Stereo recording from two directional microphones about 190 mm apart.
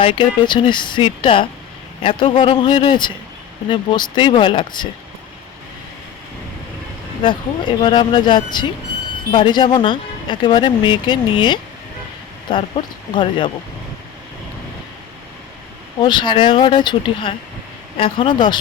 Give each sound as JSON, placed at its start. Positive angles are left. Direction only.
{"t": 0.0, "sound": "speech", "side_deg": 25}
{"t": 7.2, "sound": "speech", "side_deg": 25}
{"t": 16.0, "sound": "speech", "side_deg": 25}